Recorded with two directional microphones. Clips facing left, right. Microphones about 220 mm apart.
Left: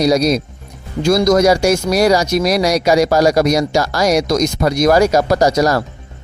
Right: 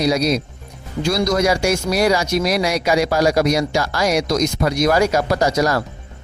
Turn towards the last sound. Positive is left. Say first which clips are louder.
# left 4 dB
turn(degrees=40)  # may be behind; listen again after turning